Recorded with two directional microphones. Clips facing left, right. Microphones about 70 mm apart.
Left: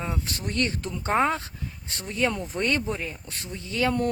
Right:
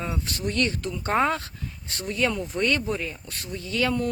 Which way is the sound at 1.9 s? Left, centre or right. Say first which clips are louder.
Right 1 dB; left.